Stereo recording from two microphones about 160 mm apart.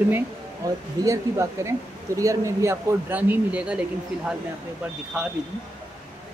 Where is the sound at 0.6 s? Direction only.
20° right (ahead or behind).